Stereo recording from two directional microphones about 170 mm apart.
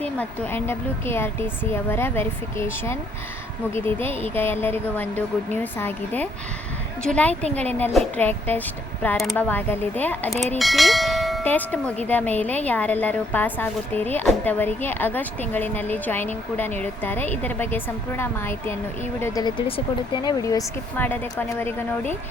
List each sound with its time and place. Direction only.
0.0 s a woman's voice: 10° left (ahead or behind)
10.6 s bell: centre (ahead or behind)
11.4 s a woman's voice: 10° left (ahead or behind); by 19.8 s 30° left (ahead or behind)
20.2 s a woman's voice: 20° left (ahead or behind)